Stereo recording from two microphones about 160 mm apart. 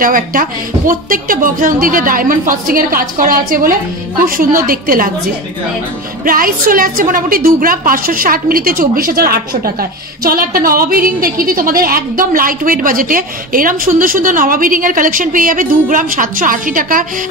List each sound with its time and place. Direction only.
0.0 s a woman's voice: 60° right (ahead or behind)
6.2 s a woman's voice: 60° right (ahead or behind)